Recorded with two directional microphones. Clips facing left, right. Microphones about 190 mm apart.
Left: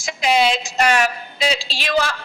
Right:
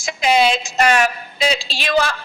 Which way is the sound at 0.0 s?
50° right (ahead or behind).